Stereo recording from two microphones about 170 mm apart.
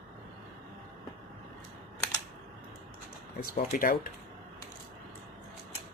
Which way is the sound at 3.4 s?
55° left (ahead or behind).